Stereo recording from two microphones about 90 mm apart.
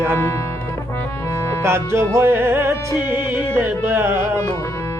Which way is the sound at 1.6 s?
30° right (ahead or behind).